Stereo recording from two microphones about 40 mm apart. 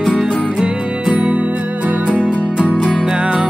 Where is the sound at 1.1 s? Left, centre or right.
Right.